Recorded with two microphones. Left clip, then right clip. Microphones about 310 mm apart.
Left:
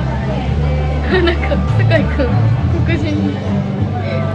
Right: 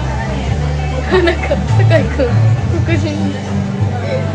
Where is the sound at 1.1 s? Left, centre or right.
Centre.